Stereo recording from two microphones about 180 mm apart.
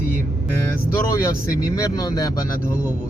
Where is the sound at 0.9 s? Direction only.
20° left (ahead or behind).